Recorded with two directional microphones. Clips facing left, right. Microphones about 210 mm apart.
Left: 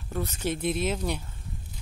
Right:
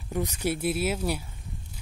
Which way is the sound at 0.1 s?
15° right (ahead or behind).